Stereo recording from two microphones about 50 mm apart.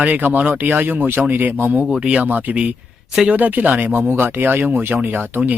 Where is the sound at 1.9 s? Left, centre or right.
Centre.